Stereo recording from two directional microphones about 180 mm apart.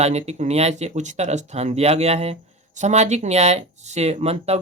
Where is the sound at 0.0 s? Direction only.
40° right (ahead or behind).